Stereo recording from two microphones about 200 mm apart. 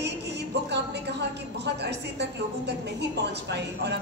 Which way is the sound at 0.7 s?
55° right (ahead or behind).